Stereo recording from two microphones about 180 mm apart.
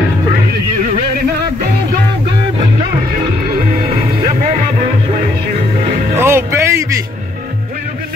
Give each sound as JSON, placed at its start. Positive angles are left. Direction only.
{"t": 3.9, "sound": "music", "side_deg": -40}
{"t": 6.1, "sound": "music", "side_deg": -15}